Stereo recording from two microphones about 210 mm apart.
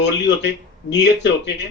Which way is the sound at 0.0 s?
55° left (ahead or behind).